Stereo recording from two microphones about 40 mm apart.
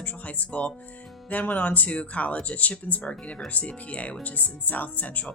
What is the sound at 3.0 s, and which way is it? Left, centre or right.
Speech, left.